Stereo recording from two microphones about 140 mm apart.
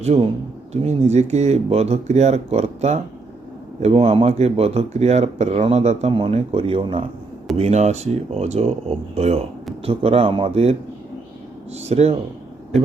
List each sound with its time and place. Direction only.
0.0 s speech: 50° right (ahead or behind)
7.6 s speech: 55° right (ahead or behind)